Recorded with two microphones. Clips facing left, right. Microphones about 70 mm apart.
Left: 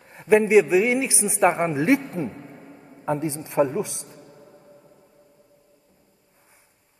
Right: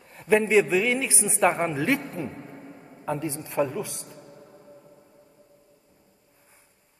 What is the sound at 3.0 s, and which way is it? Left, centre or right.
Speech, left.